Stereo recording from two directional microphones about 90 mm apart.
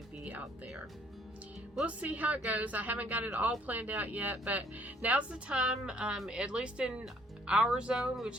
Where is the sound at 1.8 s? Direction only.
15° right (ahead or behind).